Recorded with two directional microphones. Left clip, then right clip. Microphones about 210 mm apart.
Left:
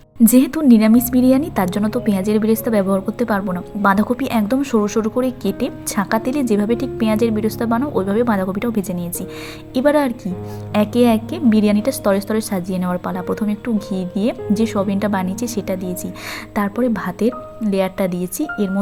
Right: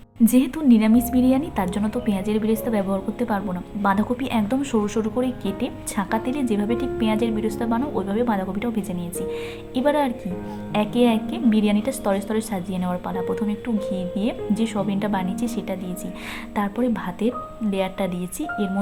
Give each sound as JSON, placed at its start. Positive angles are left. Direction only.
{"t": 0.3, "sound": "a woman's voice", "side_deg": 25}